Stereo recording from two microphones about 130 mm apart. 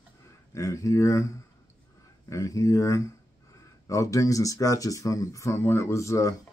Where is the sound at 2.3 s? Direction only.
25° left (ahead or behind).